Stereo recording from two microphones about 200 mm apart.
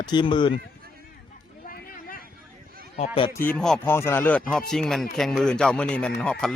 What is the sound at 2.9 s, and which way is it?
Speech, 25° left (ahead or behind).